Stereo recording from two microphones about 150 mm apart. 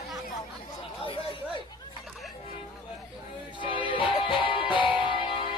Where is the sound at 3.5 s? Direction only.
35° left (ahead or behind).